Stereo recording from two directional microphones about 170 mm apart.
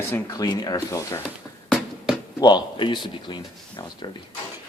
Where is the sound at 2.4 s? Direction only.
25° left (ahead or behind).